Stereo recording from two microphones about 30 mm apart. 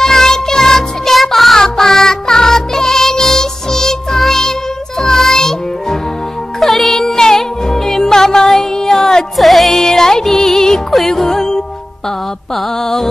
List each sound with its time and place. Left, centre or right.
0.0 s music: centre
1.1 s music: centre
1.6 s music: centre
6.6 s music: centre
9.4 s music: centre
9.8 s music: centre
12.8 s music: centre